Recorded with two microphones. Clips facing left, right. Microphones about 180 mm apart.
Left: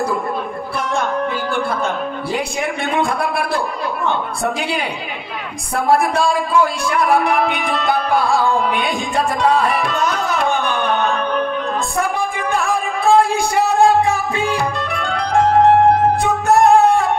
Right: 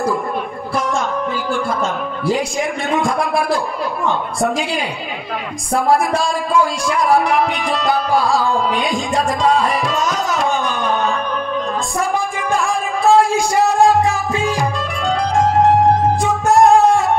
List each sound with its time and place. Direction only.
0.7 s music: 60° left (ahead or behind)
2.9 s speech: 60° left (ahead or behind)
12.0 s a sound: 60° left (ahead or behind)
15.9 s music: 60° left (ahead or behind)